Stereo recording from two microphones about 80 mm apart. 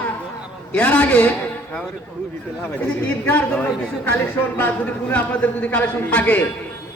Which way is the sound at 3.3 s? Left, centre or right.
Left.